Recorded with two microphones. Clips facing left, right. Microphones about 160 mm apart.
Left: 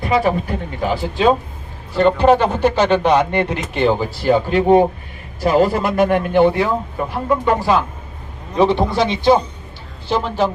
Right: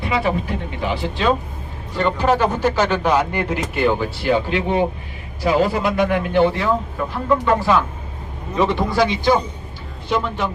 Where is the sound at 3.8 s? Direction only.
35° left (ahead or behind); by 6.7 s 50° left (ahead or behind).